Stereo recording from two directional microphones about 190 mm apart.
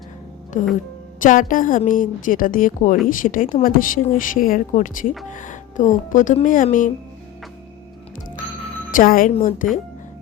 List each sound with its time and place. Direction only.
1.2 s speech: 45° left (ahead or behind)
8.9 s a woman's voice: 45° left (ahead or behind)